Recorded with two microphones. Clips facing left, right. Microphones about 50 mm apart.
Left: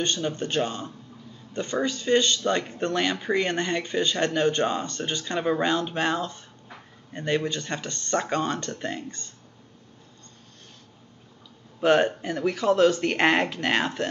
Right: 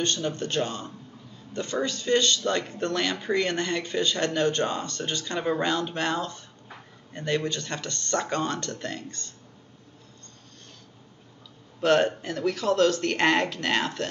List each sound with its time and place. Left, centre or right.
0.0 s speech: centre
11.8 s speech: centre